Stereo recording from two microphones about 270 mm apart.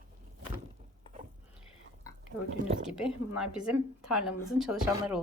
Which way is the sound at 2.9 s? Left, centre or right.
Centre.